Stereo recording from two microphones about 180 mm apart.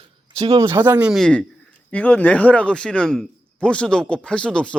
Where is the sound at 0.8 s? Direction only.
10° right (ahead or behind).